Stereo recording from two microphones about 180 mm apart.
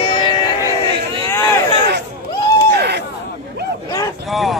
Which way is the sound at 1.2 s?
15° left (ahead or behind).